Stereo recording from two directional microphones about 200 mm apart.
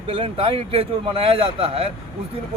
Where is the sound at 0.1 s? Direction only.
25° right (ahead or behind).